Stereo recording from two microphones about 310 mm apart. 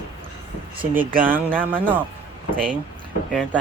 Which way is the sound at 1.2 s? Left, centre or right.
Centre.